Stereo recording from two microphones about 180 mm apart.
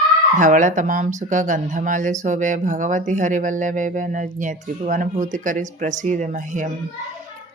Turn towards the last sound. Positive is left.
turn(degrees=-45)  # may be behind; listen again after turning